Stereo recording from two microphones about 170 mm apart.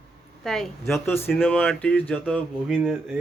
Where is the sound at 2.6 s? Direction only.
5° right (ahead or behind).